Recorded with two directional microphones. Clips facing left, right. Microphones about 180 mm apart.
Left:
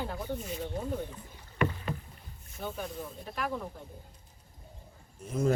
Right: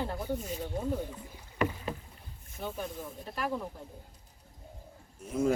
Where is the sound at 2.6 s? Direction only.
Centre (ahead or behind).